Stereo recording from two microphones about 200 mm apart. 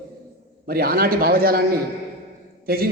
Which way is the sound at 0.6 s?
50° right (ahead or behind).